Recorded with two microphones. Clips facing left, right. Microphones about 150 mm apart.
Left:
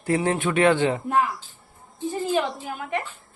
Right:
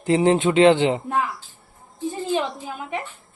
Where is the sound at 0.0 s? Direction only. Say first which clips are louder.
Right 5 dB; 20° right (ahead or behind).